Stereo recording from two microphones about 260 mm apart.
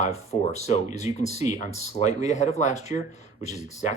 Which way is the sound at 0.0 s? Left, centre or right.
Left.